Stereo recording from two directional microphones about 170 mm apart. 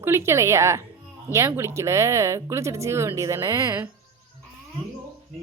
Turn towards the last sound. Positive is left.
turn(degrees=-15)  # may be behind; listen again after turning